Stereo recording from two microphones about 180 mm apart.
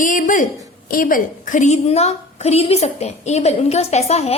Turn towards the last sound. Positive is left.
turn(degrees=35)  # may be behind; listen again after turning